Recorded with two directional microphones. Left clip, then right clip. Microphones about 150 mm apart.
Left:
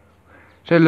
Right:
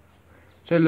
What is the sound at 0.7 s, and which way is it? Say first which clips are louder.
Speech: left 6 dB; 45° left (ahead or behind).